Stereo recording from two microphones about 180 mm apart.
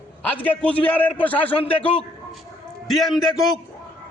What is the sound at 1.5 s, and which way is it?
Speech, 30° left (ahead or behind).